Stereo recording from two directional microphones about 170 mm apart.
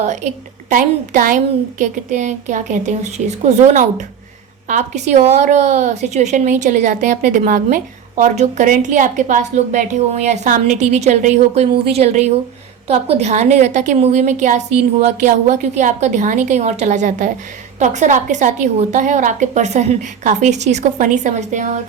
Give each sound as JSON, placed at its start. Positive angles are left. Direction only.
{"t": 0.0, "sound": "a woman's voice", "side_deg": -45}
{"t": 0.7, "sound": "a woman's voice", "side_deg": -55}